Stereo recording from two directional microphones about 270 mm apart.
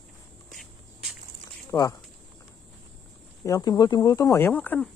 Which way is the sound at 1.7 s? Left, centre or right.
Centre.